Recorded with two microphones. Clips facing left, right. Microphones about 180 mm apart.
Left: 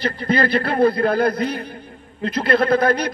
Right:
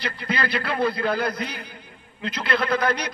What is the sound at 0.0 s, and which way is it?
A man's voice, 50° left (ahead or behind).